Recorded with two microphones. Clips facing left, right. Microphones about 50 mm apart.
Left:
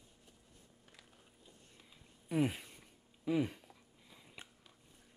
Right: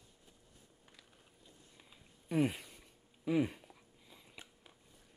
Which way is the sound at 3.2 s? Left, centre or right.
Centre.